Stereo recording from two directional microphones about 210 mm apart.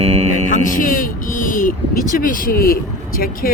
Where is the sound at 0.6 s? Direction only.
40° left (ahead or behind).